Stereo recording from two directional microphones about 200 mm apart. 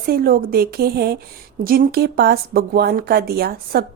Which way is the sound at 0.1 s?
50° right (ahead or behind).